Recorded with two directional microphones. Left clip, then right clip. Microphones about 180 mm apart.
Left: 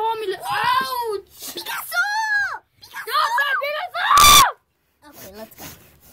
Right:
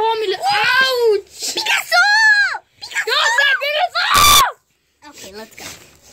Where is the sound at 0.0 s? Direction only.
30° left (ahead or behind).